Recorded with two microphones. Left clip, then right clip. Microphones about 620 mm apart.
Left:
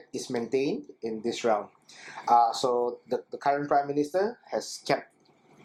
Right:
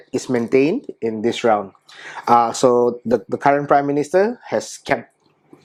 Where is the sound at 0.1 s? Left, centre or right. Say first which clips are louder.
Right 12 dB; right.